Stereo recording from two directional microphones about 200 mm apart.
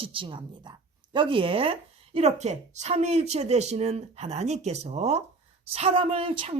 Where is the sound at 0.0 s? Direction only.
25° right (ahead or behind).